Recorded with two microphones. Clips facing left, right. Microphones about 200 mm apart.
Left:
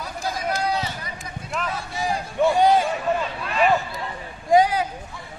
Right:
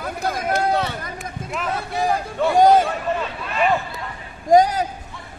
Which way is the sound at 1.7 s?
60° right (ahead or behind).